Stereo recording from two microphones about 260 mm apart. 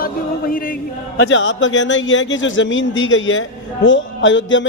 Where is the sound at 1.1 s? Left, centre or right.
Left.